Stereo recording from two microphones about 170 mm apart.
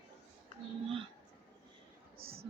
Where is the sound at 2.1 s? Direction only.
65° right (ahead or behind).